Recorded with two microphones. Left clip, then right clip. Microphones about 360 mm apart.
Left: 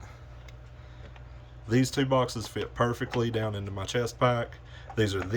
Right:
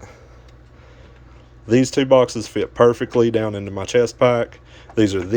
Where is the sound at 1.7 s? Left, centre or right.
Centre.